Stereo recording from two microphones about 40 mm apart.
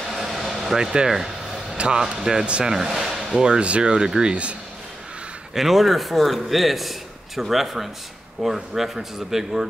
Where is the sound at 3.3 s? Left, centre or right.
Centre.